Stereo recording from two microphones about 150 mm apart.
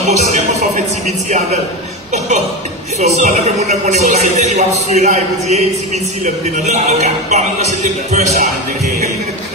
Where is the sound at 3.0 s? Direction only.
50° right (ahead or behind).